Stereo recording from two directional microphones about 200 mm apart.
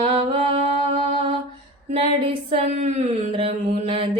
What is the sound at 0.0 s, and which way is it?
Music, 25° right (ahead or behind).